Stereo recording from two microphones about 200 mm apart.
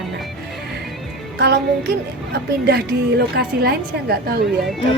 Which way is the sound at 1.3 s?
55° right (ahead or behind).